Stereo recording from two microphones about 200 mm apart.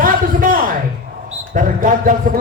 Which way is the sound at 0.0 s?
45° right (ahead or behind).